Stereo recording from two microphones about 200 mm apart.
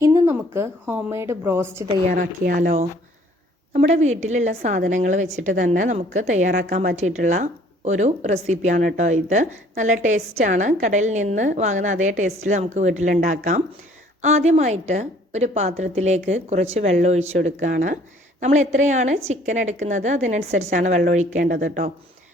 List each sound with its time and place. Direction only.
0.0 s a woman's voice: 15° right (ahead or behind)
2.1 s a woman's voice: 45° right (ahead or behind)